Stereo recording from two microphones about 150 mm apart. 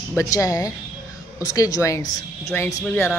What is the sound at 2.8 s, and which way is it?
Speech, 10° left (ahead or behind).